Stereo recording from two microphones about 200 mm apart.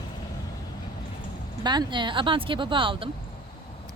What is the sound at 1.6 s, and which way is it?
Speech, 20° right (ahead or behind).